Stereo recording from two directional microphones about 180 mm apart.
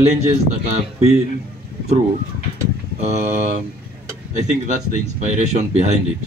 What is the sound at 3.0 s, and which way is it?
Speech, 40° right (ahead or behind).